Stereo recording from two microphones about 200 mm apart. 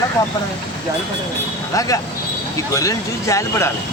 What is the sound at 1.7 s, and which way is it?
Speech, 15° left (ahead or behind).